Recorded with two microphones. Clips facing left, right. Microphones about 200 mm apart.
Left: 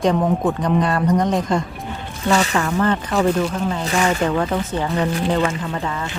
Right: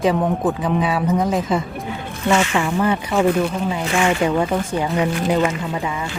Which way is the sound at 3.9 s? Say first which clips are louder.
Right 1 dB; 40° left (ahead or behind).